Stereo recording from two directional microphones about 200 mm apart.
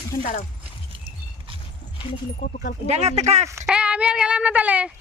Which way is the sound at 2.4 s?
45° left (ahead or behind).